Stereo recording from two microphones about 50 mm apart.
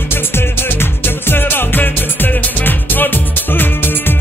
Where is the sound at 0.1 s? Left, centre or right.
Left.